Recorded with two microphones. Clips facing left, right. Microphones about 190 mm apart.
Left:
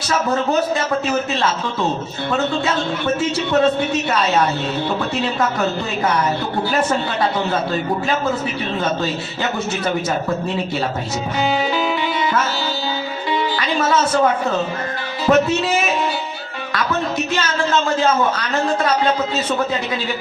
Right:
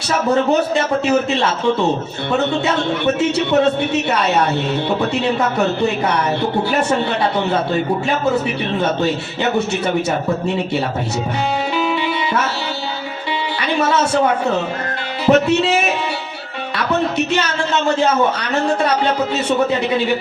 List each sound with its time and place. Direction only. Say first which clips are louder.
3.2 s a man's voice: even; 65° right (ahead or behind)
15.3 s music: right 2 dB; 20° right (ahead or behind)